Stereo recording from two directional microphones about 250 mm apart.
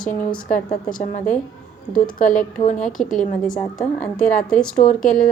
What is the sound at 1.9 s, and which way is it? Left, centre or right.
A woman's voice, left.